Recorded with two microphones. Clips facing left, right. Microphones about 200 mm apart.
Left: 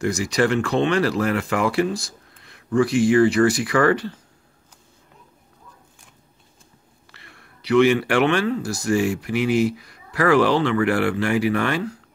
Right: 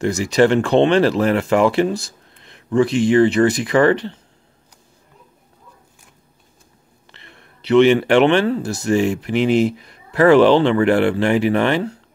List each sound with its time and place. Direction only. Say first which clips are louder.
0.0 s speech: right 5 dB; 25° right (ahead or behind)
7.1 s speech: right 3 dB; 25° right (ahead or behind)